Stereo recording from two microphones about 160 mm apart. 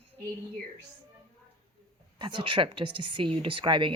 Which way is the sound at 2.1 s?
30° right (ahead or behind).